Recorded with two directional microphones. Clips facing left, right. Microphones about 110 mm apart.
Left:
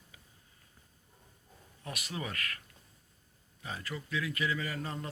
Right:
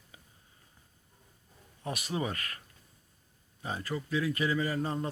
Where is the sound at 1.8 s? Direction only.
30° right (ahead or behind).